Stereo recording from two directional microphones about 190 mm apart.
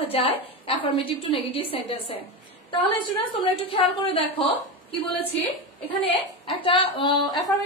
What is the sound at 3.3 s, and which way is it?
A woman's voice, 25° left (ahead or behind).